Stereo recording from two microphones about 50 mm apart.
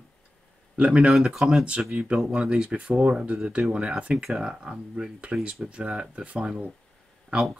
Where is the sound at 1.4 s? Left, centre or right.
Centre.